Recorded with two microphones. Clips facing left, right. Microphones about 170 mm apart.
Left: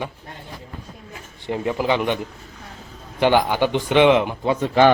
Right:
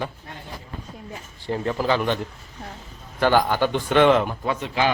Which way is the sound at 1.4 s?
15° left (ahead or behind).